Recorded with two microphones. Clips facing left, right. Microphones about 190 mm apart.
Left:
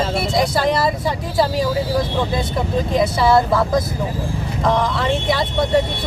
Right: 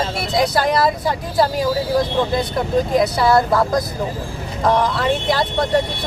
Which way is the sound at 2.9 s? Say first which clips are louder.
Left 2 dB; centre (ahead or behind).